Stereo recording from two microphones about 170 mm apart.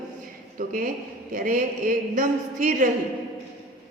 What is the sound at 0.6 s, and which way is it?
A woman's voice, 55° right (ahead or behind).